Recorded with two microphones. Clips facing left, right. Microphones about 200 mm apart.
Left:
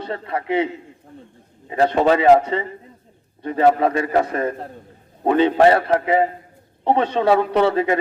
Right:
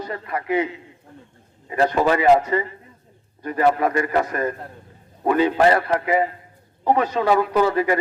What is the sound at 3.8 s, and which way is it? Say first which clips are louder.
A man's voice: left 2 dB; 25° left (ahead or behind).